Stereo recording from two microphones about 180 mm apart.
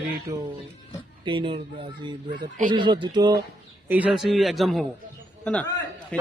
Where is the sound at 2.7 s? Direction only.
25° right (ahead or behind).